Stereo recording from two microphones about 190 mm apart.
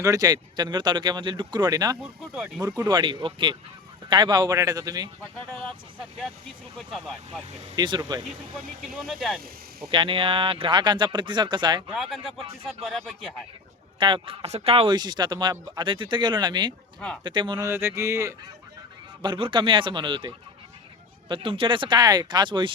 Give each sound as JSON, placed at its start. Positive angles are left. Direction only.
{"t": 0.0, "sound": "speech", "side_deg": -20}
{"t": 2.0, "sound": "speech", "side_deg": -10}
{"t": 2.6, "sound": "speech", "side_deg": -20}
{"t": 7.8, "sound": "speech", "side_deg": -20}
{"t": 9.0, "sound": "speech", "side_deg": 0}
{"t": 9.9, "sound": "speech", "side_deg": -25}
{"t": 11.9, "sound": "speech", "side_deg": 0}
{"t": 14.0, "sound": "speech", "side_deg": -25}
{"t": 17.7, "sound": "speech", "side_deg": -15}
{"t": 19.2, "sound": "speech", "side_deg": -25}